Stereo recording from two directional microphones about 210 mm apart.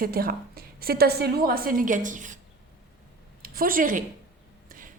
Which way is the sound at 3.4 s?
45° right (ahead or behind).